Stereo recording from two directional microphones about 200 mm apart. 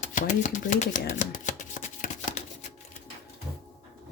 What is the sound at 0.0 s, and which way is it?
Shuffling cards, 40° left (ahead or behind).